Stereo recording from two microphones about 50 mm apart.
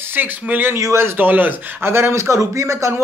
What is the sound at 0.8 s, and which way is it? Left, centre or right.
Speech, right.